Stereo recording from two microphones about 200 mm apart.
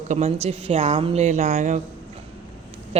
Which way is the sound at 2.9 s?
30° right (ahead or behind).